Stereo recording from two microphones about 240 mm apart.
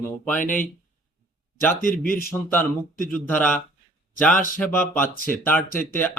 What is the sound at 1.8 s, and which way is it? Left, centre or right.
Speech, left.